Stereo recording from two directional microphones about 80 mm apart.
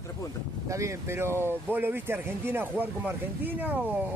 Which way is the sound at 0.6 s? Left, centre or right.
Right.